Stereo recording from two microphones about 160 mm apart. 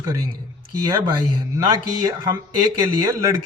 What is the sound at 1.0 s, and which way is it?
A man's voice, 25° right (ahead or behind).